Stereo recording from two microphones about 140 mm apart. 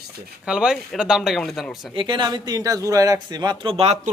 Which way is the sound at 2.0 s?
35° right (ahead or behind).